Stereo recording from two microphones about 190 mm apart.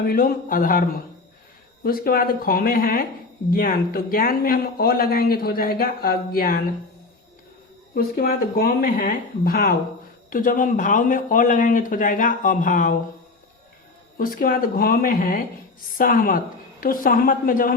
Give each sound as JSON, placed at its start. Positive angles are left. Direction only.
{"t": 0.0, "sound": "speech", "side_deg": 50}
{"t": 7.9, "sound": "speech", "side_deg": 50}
{"t": 14.2, "sound": "speech", "side_deg": 50}